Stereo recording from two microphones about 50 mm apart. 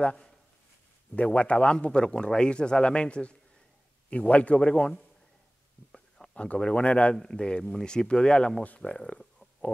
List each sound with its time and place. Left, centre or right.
0.0 s speech: centre
5.9 s a sound: centre
7.2 s speech: centre